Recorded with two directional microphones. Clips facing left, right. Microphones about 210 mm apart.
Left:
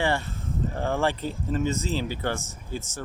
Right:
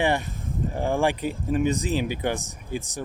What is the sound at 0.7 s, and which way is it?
Speech, 15° right (ahead or behind).